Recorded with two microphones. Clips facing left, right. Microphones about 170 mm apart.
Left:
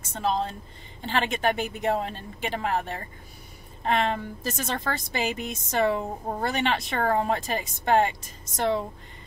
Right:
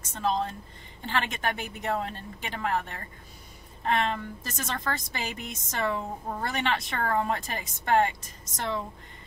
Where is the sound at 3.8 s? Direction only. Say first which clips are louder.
Left 2 dB; 20° left (ahead or behind).